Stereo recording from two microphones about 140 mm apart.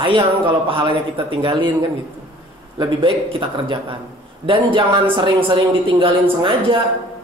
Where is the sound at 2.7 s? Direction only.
40° right (ahead or behind).